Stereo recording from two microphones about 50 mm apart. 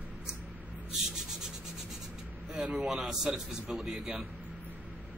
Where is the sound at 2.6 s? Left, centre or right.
Centre.